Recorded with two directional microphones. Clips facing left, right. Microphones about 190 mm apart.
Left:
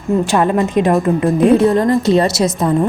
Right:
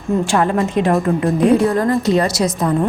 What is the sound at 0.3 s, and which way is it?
A woman's voice, 20° left (ahead or behind).